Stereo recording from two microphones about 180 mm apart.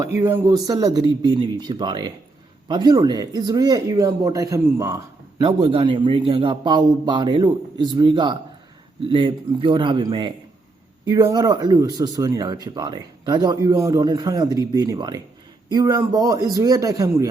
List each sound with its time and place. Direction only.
0.0 s a man's voice: 15° right (ahead or behind)